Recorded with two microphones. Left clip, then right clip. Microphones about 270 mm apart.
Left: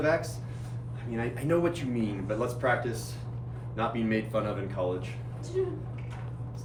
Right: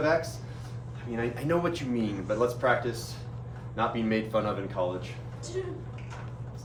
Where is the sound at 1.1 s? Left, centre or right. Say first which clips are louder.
Even; centre.